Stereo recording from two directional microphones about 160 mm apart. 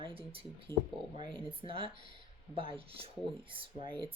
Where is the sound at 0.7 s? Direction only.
15° left (ahead or behind).